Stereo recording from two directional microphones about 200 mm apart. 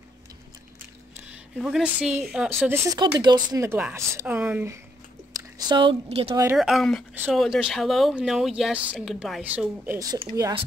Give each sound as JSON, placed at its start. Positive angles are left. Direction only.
{"t": 1.6, "sound": "speech", "side_deg": -5}
{"t": 2.9, "sound": "speech", "side_deg": -20}
{"t": 5.7, "sound": "speech", "side_deg": -25}
{"t": 6.3, "sound": "speech", "side_deg": -10}
{"t": 6.6, "sound": "speech", "side_deg": 0}